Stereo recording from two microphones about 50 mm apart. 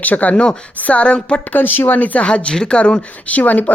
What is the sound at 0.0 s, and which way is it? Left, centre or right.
Speech, left.